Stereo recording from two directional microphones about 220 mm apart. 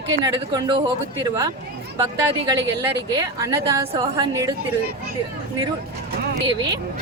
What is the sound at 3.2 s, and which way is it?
A woman's voice, 15° right (ahead or behind).